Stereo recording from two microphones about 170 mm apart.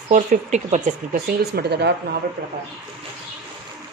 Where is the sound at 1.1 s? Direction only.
65° right (ahead or behind).